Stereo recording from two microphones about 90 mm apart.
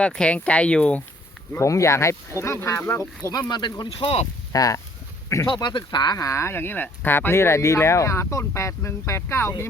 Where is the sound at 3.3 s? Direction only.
50° left (ahead or behind); by 4.2 s 70° left (ahead or behind).